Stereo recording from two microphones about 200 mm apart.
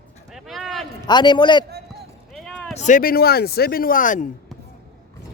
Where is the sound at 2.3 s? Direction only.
5° left (ahead or behind).